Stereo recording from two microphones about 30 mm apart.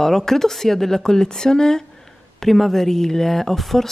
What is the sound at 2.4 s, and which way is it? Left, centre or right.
Speech, centre.